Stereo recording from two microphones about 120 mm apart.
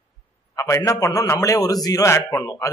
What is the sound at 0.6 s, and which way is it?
A man's voice, 25° left (ahead or behind).